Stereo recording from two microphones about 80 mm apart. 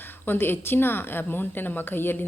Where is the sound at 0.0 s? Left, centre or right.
Left.